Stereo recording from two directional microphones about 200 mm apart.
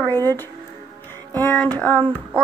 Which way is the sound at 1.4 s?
10° left (ahead or behind).